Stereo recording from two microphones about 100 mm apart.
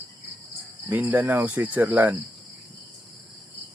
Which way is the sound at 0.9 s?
15° right (ahead or behind).